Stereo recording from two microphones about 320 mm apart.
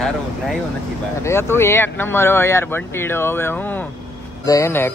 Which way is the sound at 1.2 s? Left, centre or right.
Centre.